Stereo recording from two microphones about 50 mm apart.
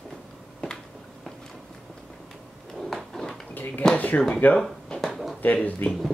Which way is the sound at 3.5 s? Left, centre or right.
Left.